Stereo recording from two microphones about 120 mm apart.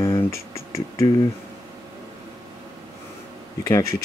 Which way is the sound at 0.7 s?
25° left (ahead or behind).